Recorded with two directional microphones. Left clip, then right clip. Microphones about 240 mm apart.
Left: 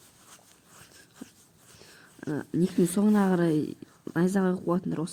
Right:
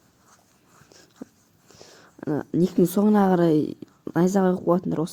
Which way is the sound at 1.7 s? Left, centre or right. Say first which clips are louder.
Right 5 dB; right.